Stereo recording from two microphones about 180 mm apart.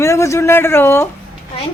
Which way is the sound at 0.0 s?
15° left (ahead or behind).